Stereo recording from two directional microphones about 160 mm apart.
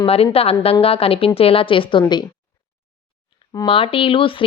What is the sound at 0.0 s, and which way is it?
A woman's voice, 35° left (ahead or behind).